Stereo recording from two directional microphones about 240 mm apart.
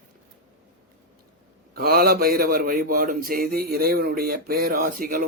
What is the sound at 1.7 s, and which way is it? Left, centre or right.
A man's voice, right.